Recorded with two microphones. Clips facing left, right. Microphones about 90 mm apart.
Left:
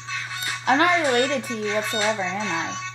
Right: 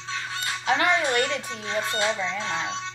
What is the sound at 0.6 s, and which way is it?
Speech, 40° left (ahead or behind).